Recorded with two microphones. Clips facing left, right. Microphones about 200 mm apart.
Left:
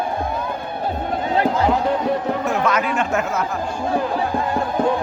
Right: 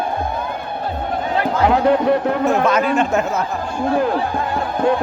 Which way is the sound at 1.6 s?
65° right (ahead or behind).